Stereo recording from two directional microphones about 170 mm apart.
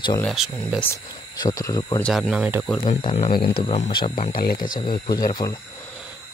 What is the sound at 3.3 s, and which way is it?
Speech, 65° left (ahead or behind).